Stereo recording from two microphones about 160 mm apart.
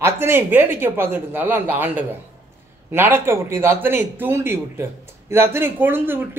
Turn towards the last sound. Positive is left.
turn(degrees=-15)  # may be behind; listen again after turning